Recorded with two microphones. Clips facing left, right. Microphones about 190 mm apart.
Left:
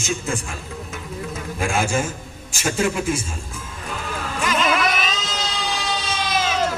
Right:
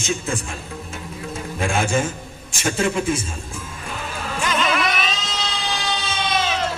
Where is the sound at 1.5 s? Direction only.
5° left (ahead or behind).